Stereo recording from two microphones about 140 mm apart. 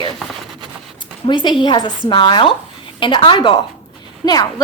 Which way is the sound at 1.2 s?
35° left (ahead or behind).